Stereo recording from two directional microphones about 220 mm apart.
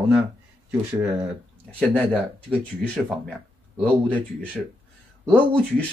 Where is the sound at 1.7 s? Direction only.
5° left (ahead or behind).